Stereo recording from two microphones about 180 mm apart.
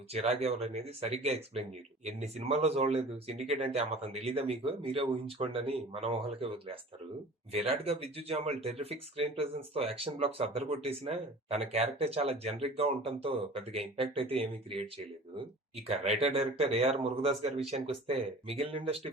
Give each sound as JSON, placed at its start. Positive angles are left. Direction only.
{"t": 0.1, "sound": "a man's voice", "side_deg": -35}